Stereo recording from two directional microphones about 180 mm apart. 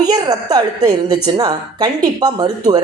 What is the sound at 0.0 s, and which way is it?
Speech, 20° right (ahead or behind).